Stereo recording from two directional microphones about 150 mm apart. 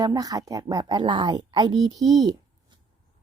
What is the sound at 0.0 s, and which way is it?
Speech, 25° right (ahead or behind).